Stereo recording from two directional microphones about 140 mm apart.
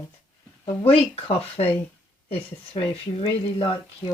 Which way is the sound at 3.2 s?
40° left (ahead or behind).